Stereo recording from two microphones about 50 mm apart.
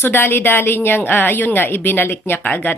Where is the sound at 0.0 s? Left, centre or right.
Left.